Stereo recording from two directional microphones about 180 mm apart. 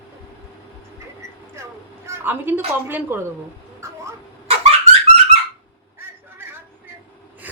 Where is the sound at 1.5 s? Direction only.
15° right (ahead or behind).